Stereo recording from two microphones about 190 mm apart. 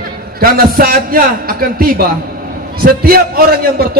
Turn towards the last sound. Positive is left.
turn(degrees=-55)  # may be behind; listen again after turning